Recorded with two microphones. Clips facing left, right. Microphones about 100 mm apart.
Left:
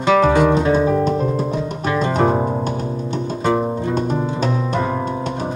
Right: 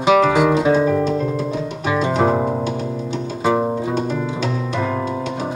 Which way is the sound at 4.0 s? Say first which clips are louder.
Left 1 dB; 40° left (ahead or behind).